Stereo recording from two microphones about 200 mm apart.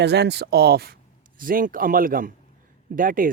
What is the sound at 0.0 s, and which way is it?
Speech, 55° right (ahead or behind).